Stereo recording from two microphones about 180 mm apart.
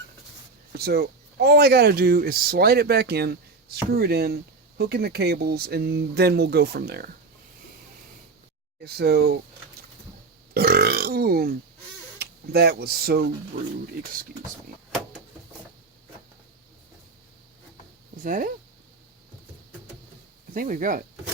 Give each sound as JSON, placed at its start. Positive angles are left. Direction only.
{"t": 0.8, "sound": "speech", "side_deg": -60}
{"t": 8.8, "sound": "speech", "side_deg": -65}
{"t": 10.5, "sound": "burping", "side_deg": -60}
{"t": 12.2, "sound": "speech", "side_deg": -60}
{"t": 18.2, "sound": "speech", "side_deg": -50}
{"t": 20.5, "sound": "speech", "side_deg": -50}